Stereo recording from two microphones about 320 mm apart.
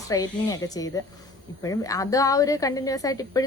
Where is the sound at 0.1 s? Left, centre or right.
Centre.